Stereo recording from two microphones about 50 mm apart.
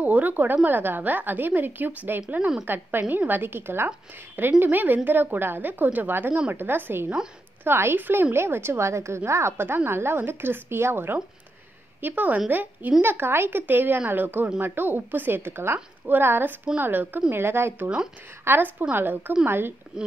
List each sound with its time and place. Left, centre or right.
0.0 s a woman's voice: right
2.6 s a child's voice: right
12.0 s a child's voice: right
17.3 s a child's voice: right
17.8 s speech: centre
18.4 s a child's voice: right